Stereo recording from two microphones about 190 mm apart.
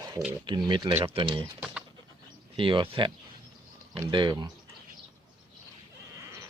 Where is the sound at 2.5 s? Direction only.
25° right (ahead or behind).